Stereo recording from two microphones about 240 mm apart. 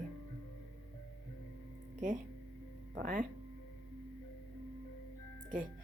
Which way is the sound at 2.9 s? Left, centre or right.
Right.